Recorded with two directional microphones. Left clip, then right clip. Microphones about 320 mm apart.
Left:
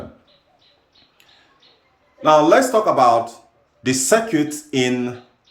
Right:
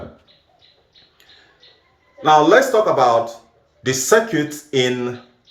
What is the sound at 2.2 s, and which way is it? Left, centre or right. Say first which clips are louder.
Speech: right 1 dB; centre.